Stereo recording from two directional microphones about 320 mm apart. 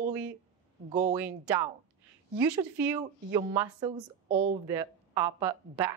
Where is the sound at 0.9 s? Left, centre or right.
Right.